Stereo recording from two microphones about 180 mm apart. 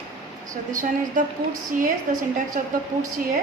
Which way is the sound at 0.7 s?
45° right (ahead or behind).